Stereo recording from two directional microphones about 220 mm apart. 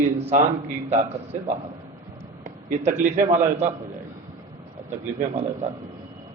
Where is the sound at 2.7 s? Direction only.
35° right (ahead or behind).